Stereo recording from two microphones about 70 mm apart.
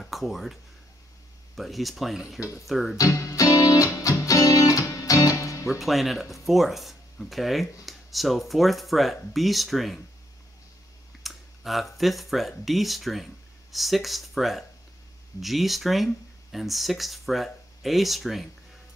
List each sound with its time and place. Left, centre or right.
0.0 s speech: centre
3.0 s music: left
5.7 s speech: centre
11.2 s speech: centre